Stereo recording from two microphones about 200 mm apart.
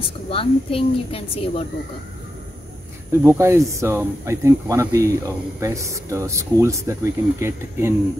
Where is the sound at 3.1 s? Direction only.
15° right (ahead or behind).